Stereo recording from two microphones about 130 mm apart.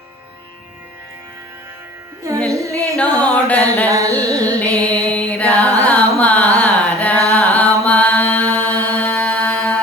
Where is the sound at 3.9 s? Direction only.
25° right (ahead or behind).